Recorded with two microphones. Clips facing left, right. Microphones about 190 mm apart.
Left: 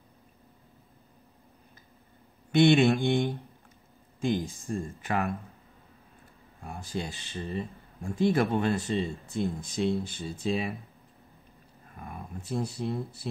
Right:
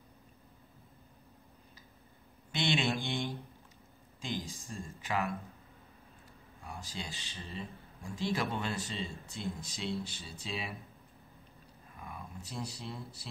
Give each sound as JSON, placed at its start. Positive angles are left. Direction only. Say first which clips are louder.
{"t": 2.5, "sound": "mantra", "louder": "left 12 dB", "side_deg": 55}
{"t": 4.5, "sound": "mantra", "louder": "left 10 dB", "side_deg": 55}
{"t": 6.6, "sound": "speech", "louder": "left 8 dB", "side_deg": 55}
{"t": 11.9, "sound": "speech", "louder": "left 5 dB", "side_deg": 50}